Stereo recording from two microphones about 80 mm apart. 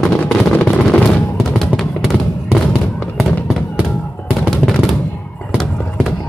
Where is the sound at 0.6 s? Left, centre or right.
Centre.